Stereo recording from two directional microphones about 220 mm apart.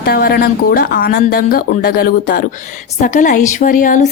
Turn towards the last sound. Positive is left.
turn(degrees=35)  # may be behind; listen again after turning